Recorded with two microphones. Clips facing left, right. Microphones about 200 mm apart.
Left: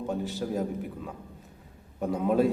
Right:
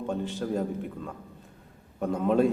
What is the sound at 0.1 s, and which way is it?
A man's voice, 5° left (ahead or behind).